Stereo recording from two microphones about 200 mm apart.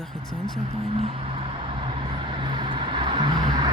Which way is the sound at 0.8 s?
30° right (ahead or behind).